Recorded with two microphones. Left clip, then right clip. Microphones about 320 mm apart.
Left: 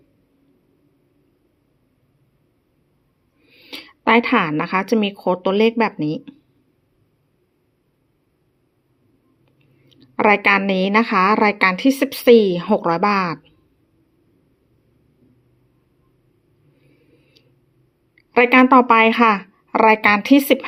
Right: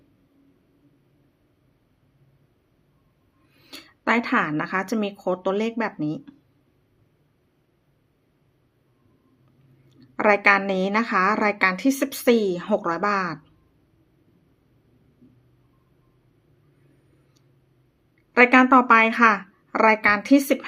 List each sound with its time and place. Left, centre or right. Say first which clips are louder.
3.5 s speech: left 8 dB; centre
9.9 s a woman's voice: left 4 dB; centre
18.3 s a woman's voice: left 3 dB; centre